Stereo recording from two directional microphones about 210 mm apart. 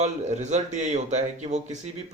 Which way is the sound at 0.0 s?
35° right (ahead or behind).